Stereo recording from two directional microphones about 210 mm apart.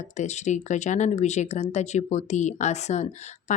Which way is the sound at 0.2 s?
35° left (ahead or behind).